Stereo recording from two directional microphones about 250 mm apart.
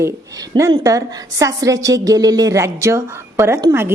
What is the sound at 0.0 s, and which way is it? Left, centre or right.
A woman's voice, centre.